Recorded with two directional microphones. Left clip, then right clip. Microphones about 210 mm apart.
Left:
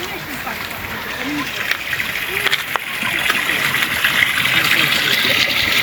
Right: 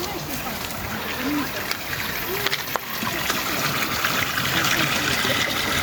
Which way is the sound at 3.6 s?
25° left (ahead or behind).